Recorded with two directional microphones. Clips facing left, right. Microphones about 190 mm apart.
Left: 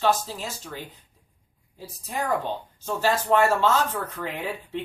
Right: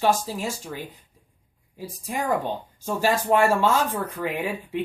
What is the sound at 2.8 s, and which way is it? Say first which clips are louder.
Speech: right 1 dB; 15° right (ahead or behind).